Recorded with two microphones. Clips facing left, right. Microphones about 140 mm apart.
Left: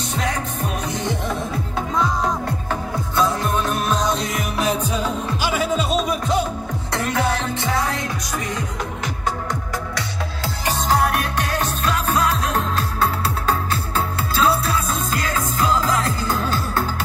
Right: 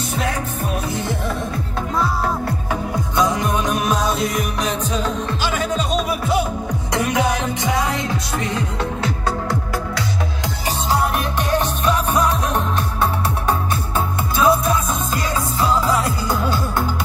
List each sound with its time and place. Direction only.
0.1 s music: 5° right (ahead or behind)
3.2 s music: 15° right (ahead or behind)
13.5 s music: 20° right (ahead or behind)